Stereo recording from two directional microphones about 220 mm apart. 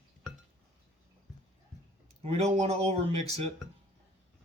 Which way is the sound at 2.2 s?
30° right (ahead or behind).